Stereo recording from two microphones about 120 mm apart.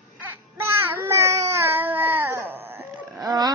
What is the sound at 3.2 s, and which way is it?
Speech, 35° right (ahead or behind).